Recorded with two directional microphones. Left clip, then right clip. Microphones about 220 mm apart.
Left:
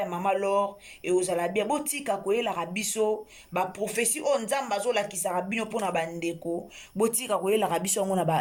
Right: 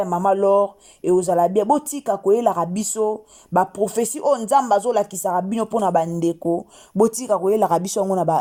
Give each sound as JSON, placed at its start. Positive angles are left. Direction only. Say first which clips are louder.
{"t": 0.0, "sound": "speech", "louder": "right 9 dB", "side_deg": -30}